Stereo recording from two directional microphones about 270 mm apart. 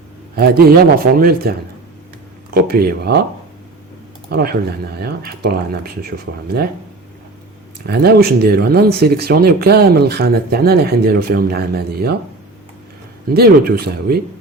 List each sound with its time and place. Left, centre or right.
0.3 s speech: right
2.6 s speech: right
4.3 s speech: right
7.9 s speech: right
13.3 s speech: right